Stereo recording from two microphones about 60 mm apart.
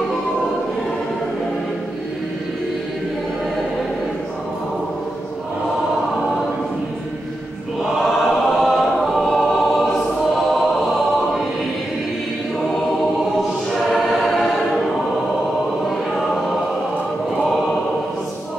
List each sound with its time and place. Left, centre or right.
7.8 s choir: centre
10.3 s music: centre
13.9 s choir: centre